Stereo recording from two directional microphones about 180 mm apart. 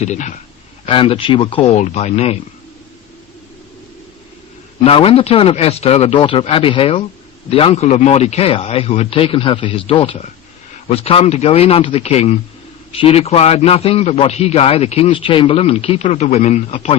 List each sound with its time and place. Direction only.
0.0 s a man's voice: 40° left (ahead or behind)
0.9 s a man's voice: 30° left (ahead or behind)
4.8 s a man's voice: 30° left (ahead or behind)